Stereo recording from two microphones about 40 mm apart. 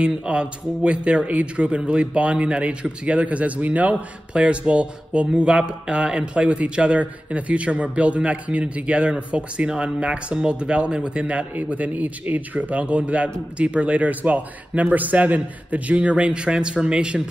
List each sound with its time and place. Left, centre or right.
0.2 s speech: right
4.3 s speech: right
11.5 s speech: right